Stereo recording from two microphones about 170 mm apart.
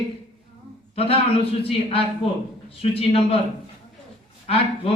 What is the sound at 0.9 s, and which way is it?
A man's voice, 35° left (ahead or behind).